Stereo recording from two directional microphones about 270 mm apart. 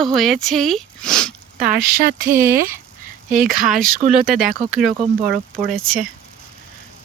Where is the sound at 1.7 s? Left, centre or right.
Right.